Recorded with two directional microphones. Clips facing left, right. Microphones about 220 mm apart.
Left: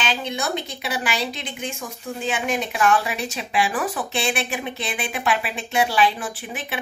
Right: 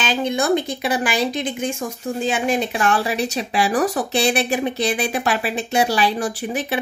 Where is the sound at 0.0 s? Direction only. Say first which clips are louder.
Right 6 dB; 45° right (ahead or behind).